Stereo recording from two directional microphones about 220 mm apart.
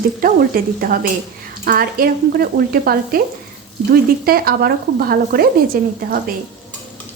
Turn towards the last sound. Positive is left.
turn(degrees=-40)  # may be behind; listen again after turning